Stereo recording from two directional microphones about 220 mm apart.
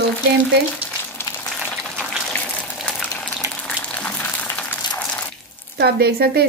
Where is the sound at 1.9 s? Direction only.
5° left (ahead or behind).